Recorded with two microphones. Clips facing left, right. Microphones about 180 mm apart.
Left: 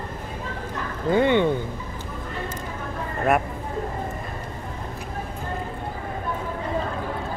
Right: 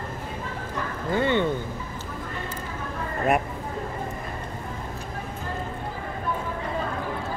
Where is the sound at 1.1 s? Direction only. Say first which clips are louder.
Left 4 dB; 15° left (ahead or behind).